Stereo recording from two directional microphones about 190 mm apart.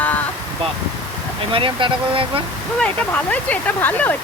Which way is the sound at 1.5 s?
25° right (ahead or behind).